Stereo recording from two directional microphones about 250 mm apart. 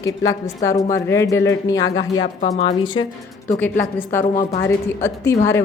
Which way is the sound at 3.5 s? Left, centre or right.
Centre.